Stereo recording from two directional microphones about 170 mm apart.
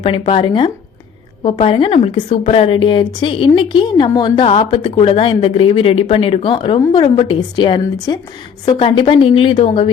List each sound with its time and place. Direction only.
0.0 s a woman's voice: 35° left (ahead or behind)